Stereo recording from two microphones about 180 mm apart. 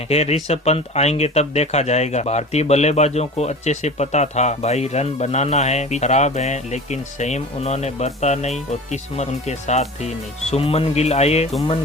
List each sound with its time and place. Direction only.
0.1 s speech: 35° left (ahead or behind)